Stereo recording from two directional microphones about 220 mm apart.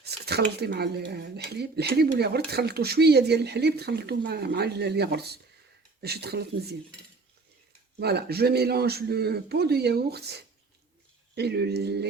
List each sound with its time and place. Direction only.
0.0 s speech: 45° right (ahead or behind)
7.9 s speech: 45° right (ahead or behind)